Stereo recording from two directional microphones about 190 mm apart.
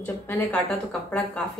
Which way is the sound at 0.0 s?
10° left (ahead or behind).